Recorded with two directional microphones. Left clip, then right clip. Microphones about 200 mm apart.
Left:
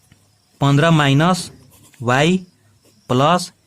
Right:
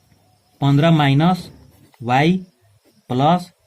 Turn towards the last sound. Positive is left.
turn(degrees=40)  # may be behind; listen again after turning